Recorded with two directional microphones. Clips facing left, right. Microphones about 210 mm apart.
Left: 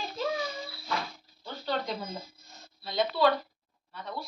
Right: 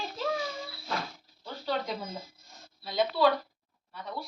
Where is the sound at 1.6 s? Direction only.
5° right (ahead or behind).